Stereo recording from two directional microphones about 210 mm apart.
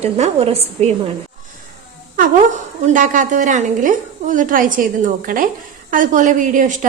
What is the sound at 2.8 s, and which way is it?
A woman's voice, 35° right (ahead or behind).